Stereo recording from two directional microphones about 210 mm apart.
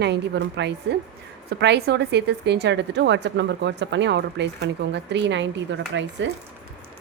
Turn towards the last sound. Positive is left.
turn(degrees=-60)  # may be behind; listen again after turning